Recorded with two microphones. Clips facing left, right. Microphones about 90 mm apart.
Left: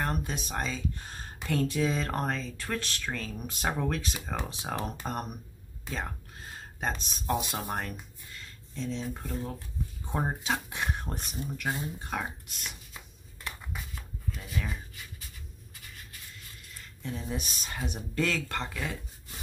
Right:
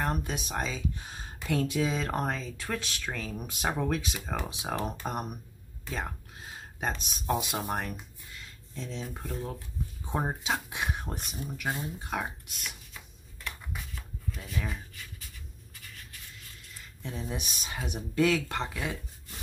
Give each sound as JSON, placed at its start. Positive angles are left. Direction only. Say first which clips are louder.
{"t": 0.0, "sound": "speech", "louder": "right 1 dB", "side_deg": -5}
{"t": 5.9, "sound": "a sound", "louder": "even", "side_deg": -5}
{"t": 7.0, "sound": "speech", "louder": "even", "side_deg": -5}
{"t": 14.3, "sound": "speech", "louder": "even", "side_deg": 0}
{"t": 17.0, "sound": "speech", "louder": "left 1 dB", "side_deg": -10}